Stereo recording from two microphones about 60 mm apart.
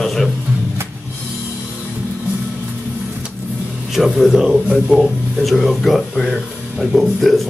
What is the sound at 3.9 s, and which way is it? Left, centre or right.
Speech, centre.